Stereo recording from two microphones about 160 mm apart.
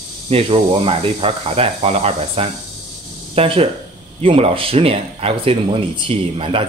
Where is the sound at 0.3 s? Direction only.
40° right (ahead or behind).